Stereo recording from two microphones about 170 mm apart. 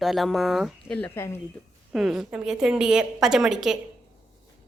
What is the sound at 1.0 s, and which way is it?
Speech, 15° left (ahead or behind).